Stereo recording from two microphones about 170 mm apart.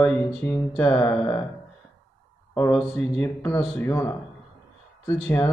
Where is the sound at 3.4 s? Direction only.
15° left (ahead or behind).